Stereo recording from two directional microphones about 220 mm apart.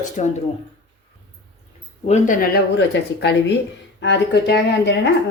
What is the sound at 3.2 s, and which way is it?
Speech, 50° left (ahead or behind).